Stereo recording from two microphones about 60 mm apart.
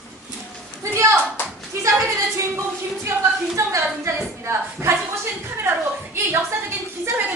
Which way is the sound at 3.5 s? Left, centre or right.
Right.